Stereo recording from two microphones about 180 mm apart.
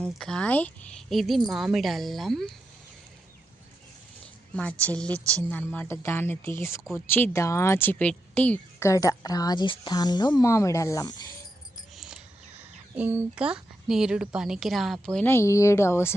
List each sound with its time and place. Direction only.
0.0 s a woman's voice: 5° left (ahead or behind)
4.5 s a woman's voice: 5° left (ahead or behind)
11.9 s a sound: 5° right (ahead or behind)
15.0 s a woman's voice: 5° left (ahead or behind)